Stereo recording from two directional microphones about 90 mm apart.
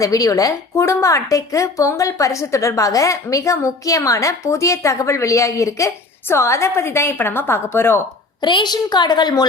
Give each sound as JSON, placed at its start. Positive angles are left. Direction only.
{"t": 0.0, "sound": "a woman's voice", "side_deg": 40}
{"t": 8.4, "sound": "a woman's voice", "side_deg": 55}